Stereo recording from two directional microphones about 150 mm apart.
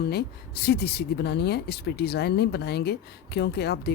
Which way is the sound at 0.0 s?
90° left.